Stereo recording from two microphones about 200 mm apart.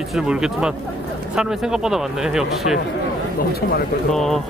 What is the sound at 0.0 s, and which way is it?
A man's voice, centre (ahead or behind).